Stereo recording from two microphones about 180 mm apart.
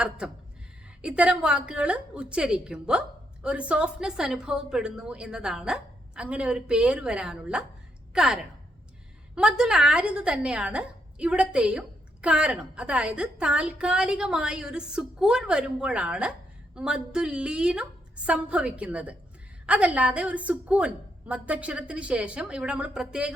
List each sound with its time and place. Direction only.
1.0 s a woman's voice: 5° right (ahead or behind)